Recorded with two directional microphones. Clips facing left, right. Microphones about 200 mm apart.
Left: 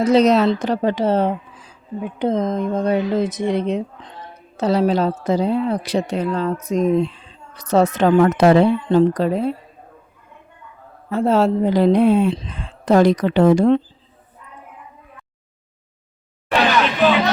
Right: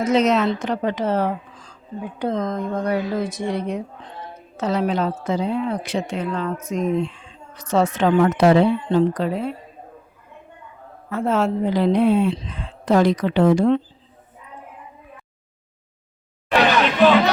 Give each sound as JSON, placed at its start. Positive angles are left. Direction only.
{"t": 0.0, "sound": "a woman's voice", "side_deg": 35}
{"t": 1.5, "sound": "a sound", "side_deg": 5}
{"t": 2.0, "sound": "speech", "side_deg": 20}
{"t": 4.5, "sound": "a woman's voice", "side_deg": 35}
{"t": 11.1, "sound": "a woman's voice", "side_deg": 30}